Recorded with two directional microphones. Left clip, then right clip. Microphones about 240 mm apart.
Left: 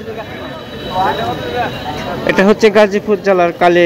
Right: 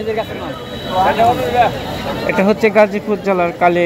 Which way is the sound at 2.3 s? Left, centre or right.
Centre.